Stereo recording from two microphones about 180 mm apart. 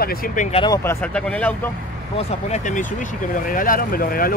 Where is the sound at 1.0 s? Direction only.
5° left (ahead or behind).